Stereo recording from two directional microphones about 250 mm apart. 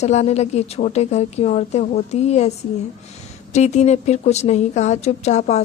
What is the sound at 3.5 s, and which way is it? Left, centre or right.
A woman's voice, left.